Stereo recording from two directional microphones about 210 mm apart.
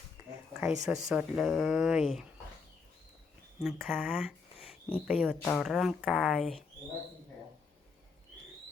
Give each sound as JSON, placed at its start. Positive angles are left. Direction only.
{"t": 0.6, "sound": "speech", "side_deg": -10}
{"t": 3.6, "sound": "speech", "side_deg": 0}